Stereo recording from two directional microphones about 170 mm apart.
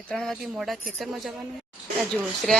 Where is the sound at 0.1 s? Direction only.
Centre (ahead or behind).